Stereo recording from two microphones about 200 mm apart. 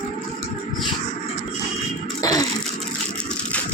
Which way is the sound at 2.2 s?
20° left (ahead or behind).